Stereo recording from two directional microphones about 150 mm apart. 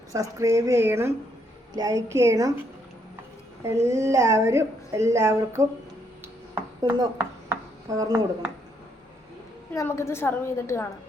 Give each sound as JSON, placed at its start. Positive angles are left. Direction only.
{"t": 0.1, "sound": "speech", "side_deg": -20}
{"t": 3.6, "sound": "speech", "side_deg": -20}
{"t": 6.2, "sound": "a sound", "side_deg": -20}
{"t": 9.7, "sound": "a woman's voice", "side_deg": 20}